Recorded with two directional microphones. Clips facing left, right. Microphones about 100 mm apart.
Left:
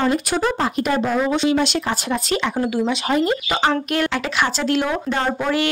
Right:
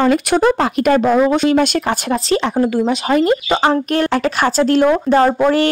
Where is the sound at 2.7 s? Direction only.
45° right (ahead or behind).